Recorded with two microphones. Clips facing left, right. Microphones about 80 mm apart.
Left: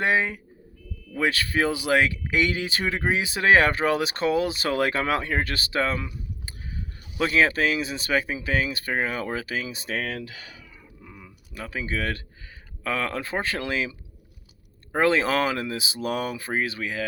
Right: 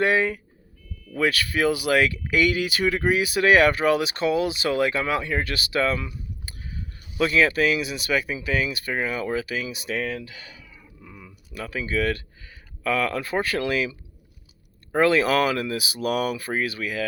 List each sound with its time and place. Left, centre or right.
0.0 s speech: left
7.2 s speech: left
10.2 s speech: left
11.0 s typing: centre
12.8 s speech: left
14.9 s speech: left